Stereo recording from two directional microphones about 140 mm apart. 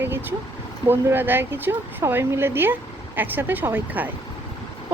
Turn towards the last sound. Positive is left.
turn(degrees=-10)  # may be behind; listen again after turning